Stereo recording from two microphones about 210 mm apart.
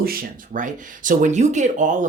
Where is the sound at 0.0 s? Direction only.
45° right (ahead or behind).